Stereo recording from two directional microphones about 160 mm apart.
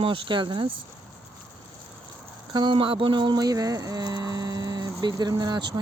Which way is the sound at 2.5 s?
25° right (ahead or behind).